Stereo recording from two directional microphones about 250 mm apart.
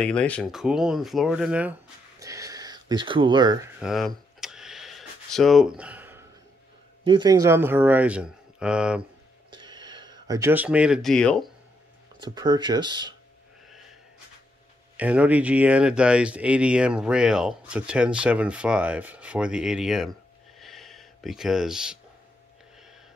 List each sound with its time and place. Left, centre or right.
0.0 s speech: centre
3.8 s speech: centre
4.4 s a sound: centre
7.1 s speech: centre
9.5 s speech: centre
12.2 s speech: centre
15.0 s speech: centre
20.5 s a sound: centre